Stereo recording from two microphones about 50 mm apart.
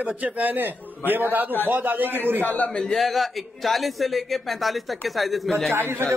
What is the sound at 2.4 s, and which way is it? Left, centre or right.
Speech, left.